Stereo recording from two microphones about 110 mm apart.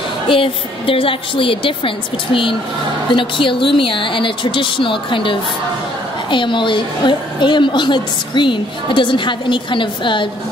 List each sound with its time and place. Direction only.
0.3 s a woman's voice: 55° left (ahead or behind)
3.2 s a woman's voice: 50° left (ahead or behind)